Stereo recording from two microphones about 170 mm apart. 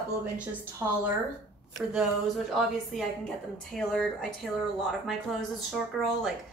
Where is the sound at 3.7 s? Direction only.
Centre (ahead or behind).